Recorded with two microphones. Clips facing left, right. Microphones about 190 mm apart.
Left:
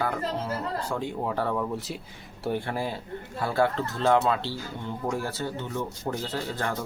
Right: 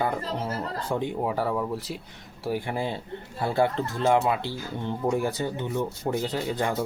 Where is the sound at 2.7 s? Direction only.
20° right (ahead or behind).